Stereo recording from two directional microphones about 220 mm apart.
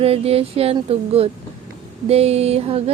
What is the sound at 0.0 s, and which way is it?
A woman's voice, 25° right (ahead or behind).